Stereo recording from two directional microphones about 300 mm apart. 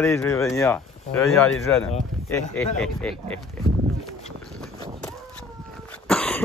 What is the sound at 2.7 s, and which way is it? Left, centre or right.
Speech, centre.